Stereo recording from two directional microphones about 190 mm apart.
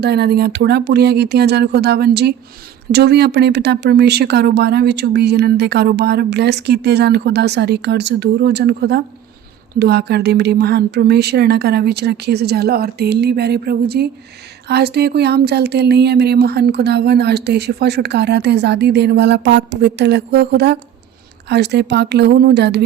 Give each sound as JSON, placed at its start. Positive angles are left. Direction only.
{"t": 0.0, "sound": "speech", "side_deg": -60}